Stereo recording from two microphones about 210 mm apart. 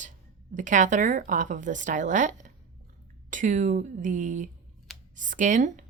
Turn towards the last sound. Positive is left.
turn(degrees=-35)  # may be behind; listen again after turning